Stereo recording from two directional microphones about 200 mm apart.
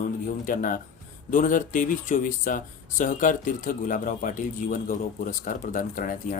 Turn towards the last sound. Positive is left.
turn(degrees=40)  # may be behind; listen again after turning